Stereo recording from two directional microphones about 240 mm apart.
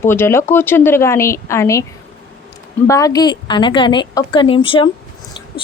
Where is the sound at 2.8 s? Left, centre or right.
Centre.